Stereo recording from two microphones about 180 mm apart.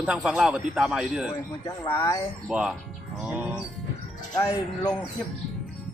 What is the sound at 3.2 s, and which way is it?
Music, 5° right (ahead or behind).